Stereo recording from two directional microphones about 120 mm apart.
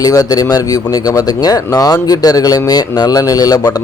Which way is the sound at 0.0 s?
30° left (ahead or behind).